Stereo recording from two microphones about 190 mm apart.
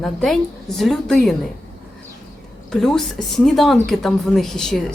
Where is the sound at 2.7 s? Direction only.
Centre (ahead or behind).